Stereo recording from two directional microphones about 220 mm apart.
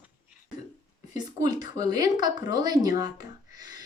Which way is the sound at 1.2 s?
20° right (ahead or behind).